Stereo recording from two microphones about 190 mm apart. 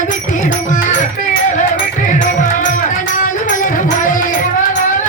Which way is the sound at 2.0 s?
40° left (ahead or behind).